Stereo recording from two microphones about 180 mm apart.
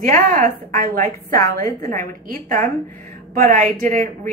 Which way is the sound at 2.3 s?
50° right (ahead or behind).